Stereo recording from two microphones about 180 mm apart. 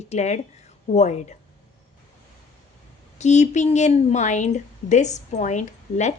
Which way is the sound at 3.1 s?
40° left (ahead or behind).